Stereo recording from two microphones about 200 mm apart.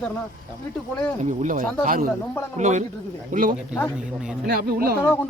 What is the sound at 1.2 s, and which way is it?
Speech, 40° right (ahead or behind).